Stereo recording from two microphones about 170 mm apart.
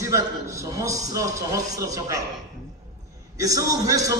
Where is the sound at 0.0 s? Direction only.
15° right (ahead or behind).